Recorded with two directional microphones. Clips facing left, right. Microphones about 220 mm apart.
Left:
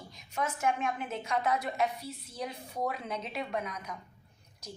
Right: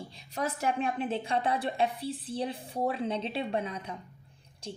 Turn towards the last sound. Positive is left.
turn(degrees=-30)  # may be behind; listen again after turning